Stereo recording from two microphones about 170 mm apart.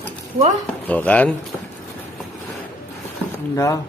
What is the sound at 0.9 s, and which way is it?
Speech, 10° left (ahead or behind).